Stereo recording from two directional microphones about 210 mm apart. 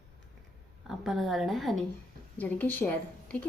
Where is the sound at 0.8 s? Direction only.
Centre (ahead or behind).